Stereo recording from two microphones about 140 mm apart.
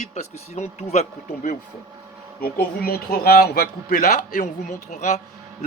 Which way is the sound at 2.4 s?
90° left.